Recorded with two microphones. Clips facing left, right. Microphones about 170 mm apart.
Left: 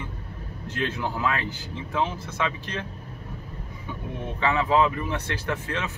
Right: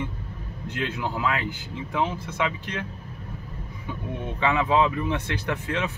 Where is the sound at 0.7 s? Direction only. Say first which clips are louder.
Even; 15° right (ahead or behind).